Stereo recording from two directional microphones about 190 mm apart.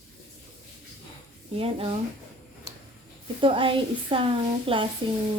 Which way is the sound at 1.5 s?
30° right (ahead or behind).